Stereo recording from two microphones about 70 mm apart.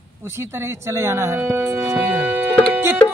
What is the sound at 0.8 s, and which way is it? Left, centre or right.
Music, right.